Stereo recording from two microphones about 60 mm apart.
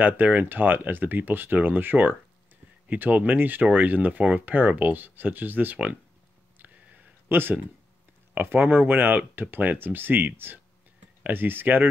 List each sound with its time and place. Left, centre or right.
0.0 s speech: right
7.2 s speech: right